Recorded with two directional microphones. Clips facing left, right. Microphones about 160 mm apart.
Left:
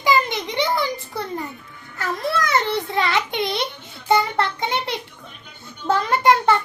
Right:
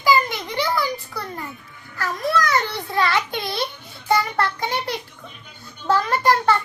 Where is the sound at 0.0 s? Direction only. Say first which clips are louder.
Even; 20° left (ahead or behind).